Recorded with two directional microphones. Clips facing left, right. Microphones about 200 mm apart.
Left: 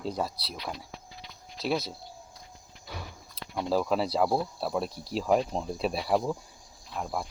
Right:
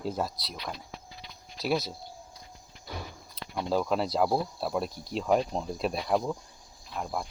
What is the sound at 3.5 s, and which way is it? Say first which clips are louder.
Speech: left 1 dB; centre (ahead or behind).